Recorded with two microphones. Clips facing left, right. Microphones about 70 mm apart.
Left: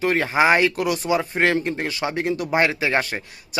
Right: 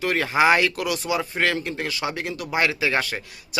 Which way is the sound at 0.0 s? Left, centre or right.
Centre.